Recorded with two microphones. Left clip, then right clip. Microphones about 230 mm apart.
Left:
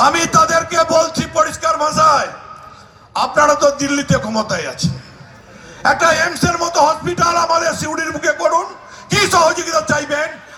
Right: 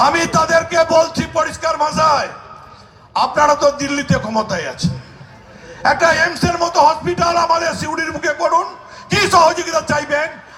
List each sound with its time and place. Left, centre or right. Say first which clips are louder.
0.0 s music: left 2 dB; left